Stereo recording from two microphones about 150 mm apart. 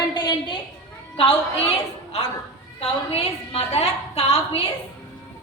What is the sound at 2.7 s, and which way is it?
A woman's voice, 40° left (ahead or behind).